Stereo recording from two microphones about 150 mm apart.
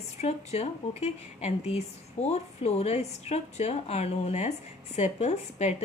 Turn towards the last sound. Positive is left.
turn(degrees=50)  # may be behind; listen again after turning